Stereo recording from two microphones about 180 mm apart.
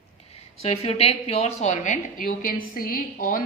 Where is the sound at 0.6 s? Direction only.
35° left (ahead or behind); by 3.4 s 50° left (ahead or behind).